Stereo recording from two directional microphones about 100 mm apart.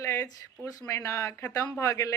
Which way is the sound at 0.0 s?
30° left (ahead or behind).